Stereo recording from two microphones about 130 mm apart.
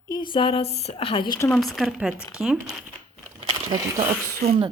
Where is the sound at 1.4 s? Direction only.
5° left (ahead or behind).